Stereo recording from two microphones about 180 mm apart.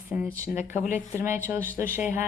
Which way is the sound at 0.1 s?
45° left (ahead or behind).